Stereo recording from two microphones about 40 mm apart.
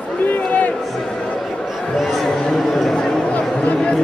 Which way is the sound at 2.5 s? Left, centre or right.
Centre.